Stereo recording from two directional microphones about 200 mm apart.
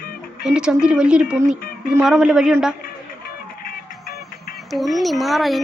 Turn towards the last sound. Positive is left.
turn(degrees=0)  # may be behind; listen again after turning